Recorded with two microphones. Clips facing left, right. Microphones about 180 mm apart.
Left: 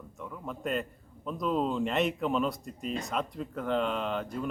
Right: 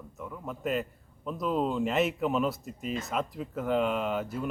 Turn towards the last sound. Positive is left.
turn(degrees=-5)  # may be behind; listen again after turning